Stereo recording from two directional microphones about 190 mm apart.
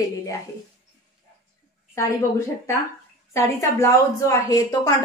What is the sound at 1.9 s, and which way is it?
A woman's voice, 15° left (ahead or behind).